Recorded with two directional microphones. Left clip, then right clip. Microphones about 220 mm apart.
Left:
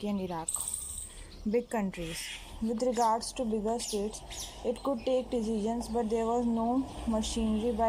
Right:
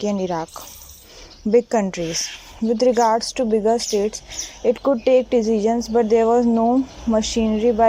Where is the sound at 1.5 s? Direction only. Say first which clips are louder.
Right 14 dB; 20° right (ahead or behind).